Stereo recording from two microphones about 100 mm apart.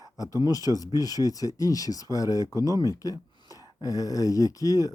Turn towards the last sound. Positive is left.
turn(degrees=35)  # may be behind; listen again after turning